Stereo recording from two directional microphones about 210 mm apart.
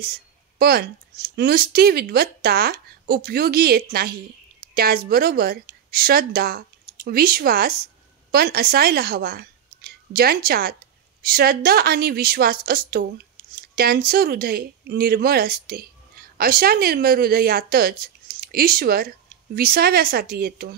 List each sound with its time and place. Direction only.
0.6 s a woman's voice: 50° right (ahead or behind)